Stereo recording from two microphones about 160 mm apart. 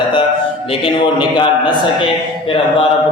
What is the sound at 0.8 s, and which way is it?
Speech, 30° left (ahead or behind).